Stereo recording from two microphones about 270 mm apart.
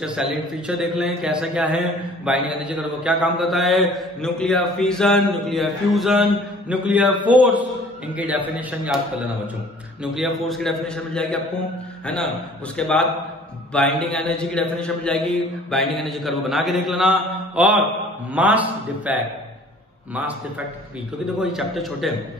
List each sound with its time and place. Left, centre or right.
0.0 s a man's voice: centre
10.1 s a man's voice: centre
12.1 s a man's voice: centre
21.4 s a man's voice: centre